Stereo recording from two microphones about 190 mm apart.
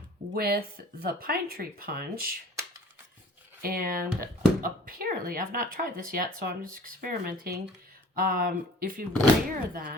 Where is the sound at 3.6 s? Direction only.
50° right (ahead or behind).